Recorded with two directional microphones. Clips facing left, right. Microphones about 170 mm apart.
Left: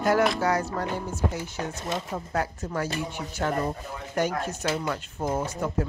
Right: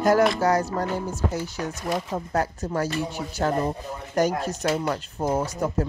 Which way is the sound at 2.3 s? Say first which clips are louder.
Right 3 dB; 40° right (ahead or behind).